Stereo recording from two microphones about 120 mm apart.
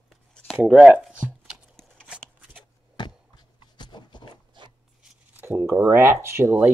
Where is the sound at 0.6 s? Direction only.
10° right (ahead or behind).